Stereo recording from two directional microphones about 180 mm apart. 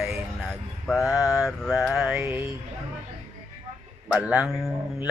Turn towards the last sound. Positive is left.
turn(degrees=-5)  # may be behind; listen again after turning